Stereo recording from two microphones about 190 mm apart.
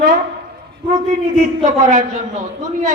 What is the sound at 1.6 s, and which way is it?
Speech, 40° right (ahead or behind).